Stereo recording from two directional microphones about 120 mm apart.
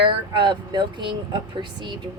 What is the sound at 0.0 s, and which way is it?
Speech, 45° right (ahead or behind).